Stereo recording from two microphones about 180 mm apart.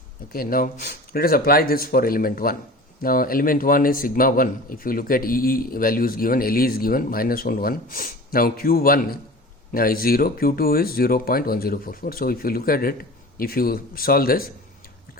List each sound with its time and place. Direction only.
0.3 s a man's voice: 50° left (ahead or behind)